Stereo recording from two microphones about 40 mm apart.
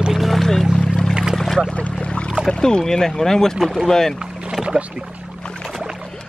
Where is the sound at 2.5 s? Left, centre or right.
Centre.